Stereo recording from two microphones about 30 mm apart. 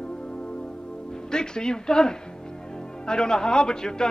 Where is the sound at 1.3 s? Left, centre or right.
Left.